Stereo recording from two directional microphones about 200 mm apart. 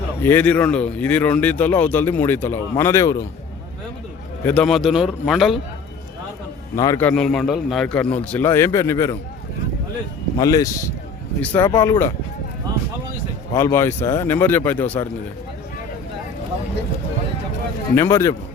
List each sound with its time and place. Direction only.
0.2 s speech: 10° left (ahead or behind)
4.4 s a man's voice: 5° left (ahead or behind)
6.7 s speech: 15° left (ahead or behind)
10.3 s speech: 20° left (ahead or behind)
13.5 s speech: 15° left (ahead or behind)
17.9 s speech: 10° left (ahead or behind)